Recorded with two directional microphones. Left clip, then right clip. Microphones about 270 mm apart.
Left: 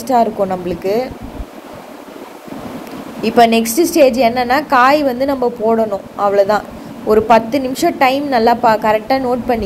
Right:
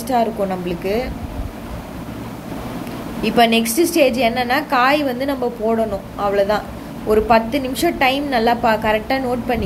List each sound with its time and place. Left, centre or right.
0.0 s a woman's voice: centre
3.3 s a woman's voice: centre